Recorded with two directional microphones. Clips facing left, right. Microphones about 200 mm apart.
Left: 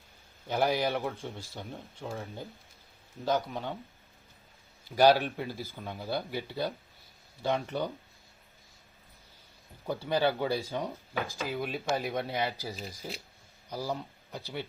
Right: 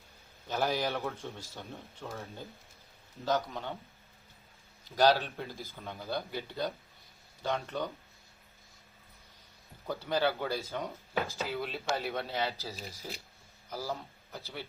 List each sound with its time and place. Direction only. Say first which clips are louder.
0.4 s speech: left 3 dB; 15° left (ahead or behind)
4.9 s speech: left 3 dB; 10° left (ahead or behind)
9.8 s speech: left 2 dB; 15° left (ahead or behind)